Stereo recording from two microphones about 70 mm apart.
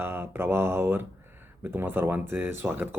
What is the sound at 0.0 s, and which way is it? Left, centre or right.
Speech, right.